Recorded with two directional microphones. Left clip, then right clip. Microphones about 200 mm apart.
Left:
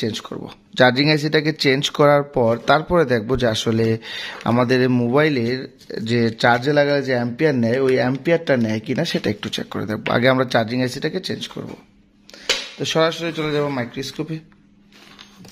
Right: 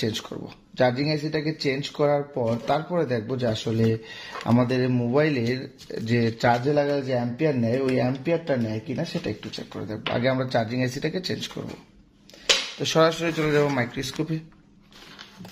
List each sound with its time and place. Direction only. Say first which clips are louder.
0.0 s speech: left 3 dB; 20° left (ahead or behind)
0.7 s speech: left 8 dB; 40° left (ahead or behind); by 11.5 s 20° left (ahead or behind)
12.7 s speech: left 2 dB; 15° left (ahead or behind)